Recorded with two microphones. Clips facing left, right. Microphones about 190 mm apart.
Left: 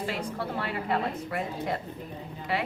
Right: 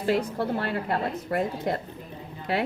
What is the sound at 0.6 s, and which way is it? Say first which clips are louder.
A woman's voice: right 2 dB; 50° right (ahead or behind).